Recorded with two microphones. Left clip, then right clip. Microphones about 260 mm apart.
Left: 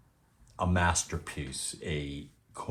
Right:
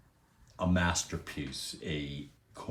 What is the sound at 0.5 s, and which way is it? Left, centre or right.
Speech, left.